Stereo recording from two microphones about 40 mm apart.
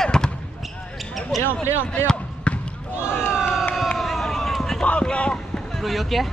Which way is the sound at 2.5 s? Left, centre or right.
Left.